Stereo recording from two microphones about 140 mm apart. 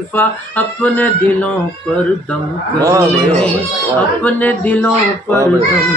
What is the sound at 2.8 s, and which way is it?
Speech, 20° right (ahead or behind).